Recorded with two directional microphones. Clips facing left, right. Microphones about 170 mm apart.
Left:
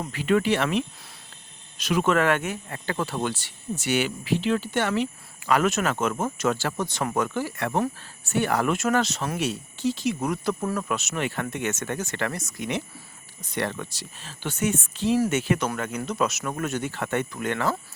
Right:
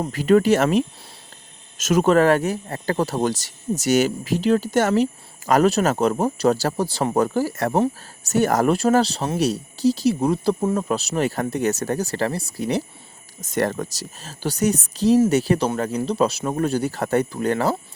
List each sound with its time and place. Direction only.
0.0 s speech: 40° right (ahead or behind)